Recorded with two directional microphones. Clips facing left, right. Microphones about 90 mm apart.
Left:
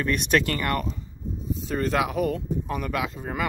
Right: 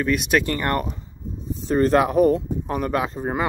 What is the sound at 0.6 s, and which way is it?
Speech, 35° right (ahead or behind).